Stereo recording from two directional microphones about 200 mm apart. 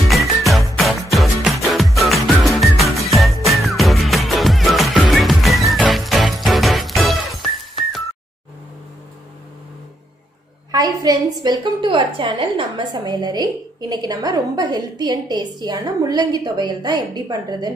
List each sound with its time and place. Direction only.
0.4 s music: centre (ahead or behind)
10.7 s a woman's voice: 20° right (ahead or behind)